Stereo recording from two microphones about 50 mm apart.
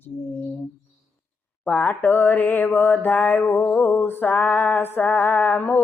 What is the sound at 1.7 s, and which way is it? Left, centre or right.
Mantra, left.